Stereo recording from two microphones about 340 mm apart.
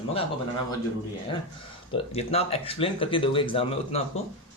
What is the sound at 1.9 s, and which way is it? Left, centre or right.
Speech, centre.